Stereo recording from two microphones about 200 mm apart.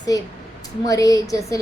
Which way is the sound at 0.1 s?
20° left (ahead or behind).